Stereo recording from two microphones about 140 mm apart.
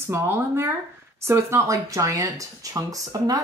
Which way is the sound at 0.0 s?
15° right (ahead or behind).